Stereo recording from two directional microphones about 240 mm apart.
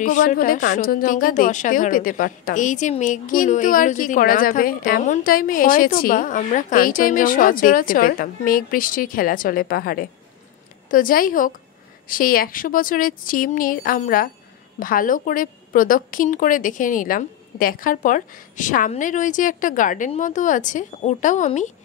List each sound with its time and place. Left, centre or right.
0.0 s a woman's voice: left